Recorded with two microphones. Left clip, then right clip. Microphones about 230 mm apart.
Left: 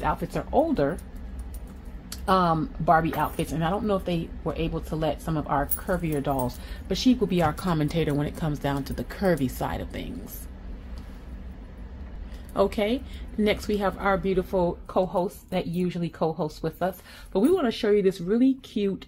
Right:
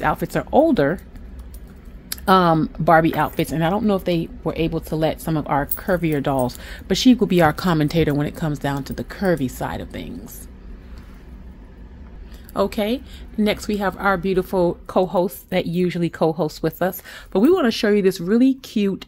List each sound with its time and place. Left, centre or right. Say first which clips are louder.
0.0 s speech: right 7 dB; right
2.0 s speech: right 7 dB; right
12.5 s speech: right 3 dB; right